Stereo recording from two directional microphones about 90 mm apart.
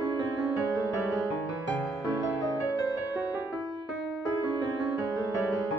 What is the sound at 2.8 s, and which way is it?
Music, 40° left (ahead or behind).